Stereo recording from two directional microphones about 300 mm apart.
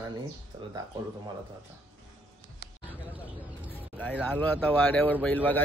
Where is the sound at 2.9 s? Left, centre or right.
Centre.